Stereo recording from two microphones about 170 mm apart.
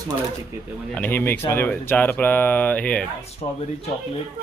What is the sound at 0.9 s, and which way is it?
Speech, 10° left (ahead or behind).